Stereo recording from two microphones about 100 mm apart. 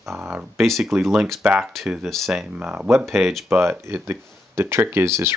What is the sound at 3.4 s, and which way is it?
Speech, 20° right (ahead or behind).